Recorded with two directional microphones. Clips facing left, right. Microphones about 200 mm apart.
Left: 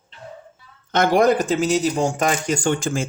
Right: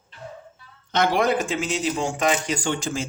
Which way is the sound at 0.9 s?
45° left (ahead or behind).